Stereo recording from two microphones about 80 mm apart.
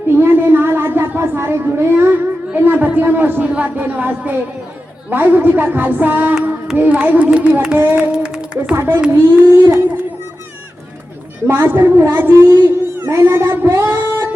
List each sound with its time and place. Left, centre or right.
0.1 s a sound: right
2.5 s speech: right
8.1 s speech: centre
8.7 s speech: right
11.4 s speech: right